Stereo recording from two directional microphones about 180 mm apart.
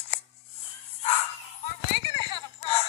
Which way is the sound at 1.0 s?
35° left (ahead or behind).